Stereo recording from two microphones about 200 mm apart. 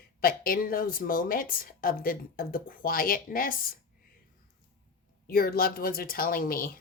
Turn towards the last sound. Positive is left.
turn(degrees=45)  # may be behind; listen again after turning